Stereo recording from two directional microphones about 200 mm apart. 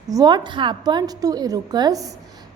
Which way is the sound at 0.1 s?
20° right (ahead or behind).